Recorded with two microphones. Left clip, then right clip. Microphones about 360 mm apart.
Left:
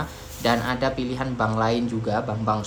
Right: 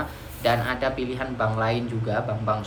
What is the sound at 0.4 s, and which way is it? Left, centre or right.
A man's voice, centre.